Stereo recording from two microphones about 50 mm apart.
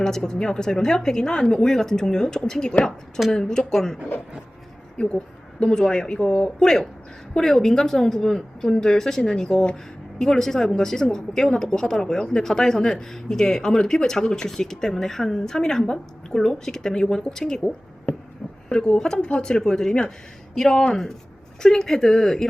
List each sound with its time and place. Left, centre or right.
0.0 s speech: centre
5.0 s speech: centre
18.7 s speech: centre